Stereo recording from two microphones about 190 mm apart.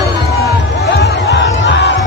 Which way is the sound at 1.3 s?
70° left (ahead or behind).